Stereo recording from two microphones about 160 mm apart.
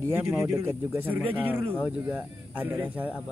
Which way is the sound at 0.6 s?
15° right (ahead or behind).